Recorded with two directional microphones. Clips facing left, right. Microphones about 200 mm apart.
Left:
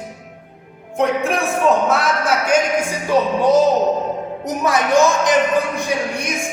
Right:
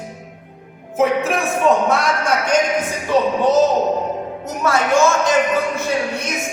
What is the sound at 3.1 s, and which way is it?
Music, 10° left (ahead or behind).